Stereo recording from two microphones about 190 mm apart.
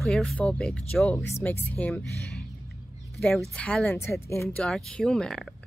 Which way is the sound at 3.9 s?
15° left (ahead or behind).